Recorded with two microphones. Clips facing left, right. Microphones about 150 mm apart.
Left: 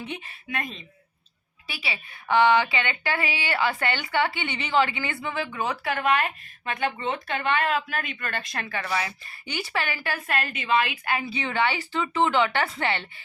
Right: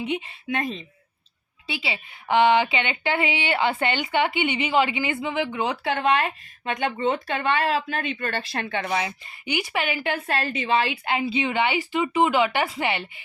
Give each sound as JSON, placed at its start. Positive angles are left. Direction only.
{"t": 0.0, "sound": "a woman's voice", "side_deg": -20}
{"t": 0.5, "sound": "a woman's voice", "side_deg": -30}